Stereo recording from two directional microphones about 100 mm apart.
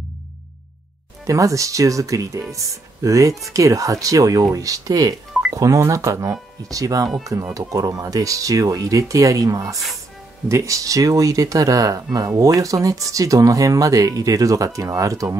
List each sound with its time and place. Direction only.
1.2 s speech: 30° right (ahead or behind)